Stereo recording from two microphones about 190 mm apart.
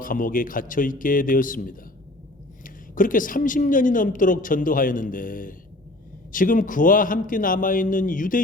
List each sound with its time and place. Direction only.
0.0 s speech: 45° left (ahead or behind)